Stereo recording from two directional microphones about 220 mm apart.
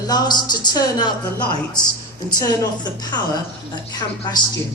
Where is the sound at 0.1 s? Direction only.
20° left (ahead or behind).